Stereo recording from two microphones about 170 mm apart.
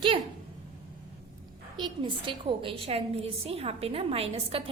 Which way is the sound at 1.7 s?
30° right (ahead or behind).